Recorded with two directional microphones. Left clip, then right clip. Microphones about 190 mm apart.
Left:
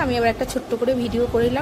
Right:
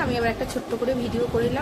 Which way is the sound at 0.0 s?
40° left (ahead or behind).